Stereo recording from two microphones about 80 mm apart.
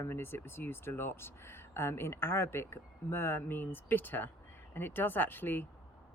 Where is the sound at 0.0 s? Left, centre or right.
Left.